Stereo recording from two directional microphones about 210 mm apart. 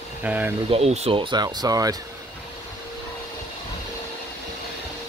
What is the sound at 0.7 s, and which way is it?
Speech, 30° right (ahead or behind).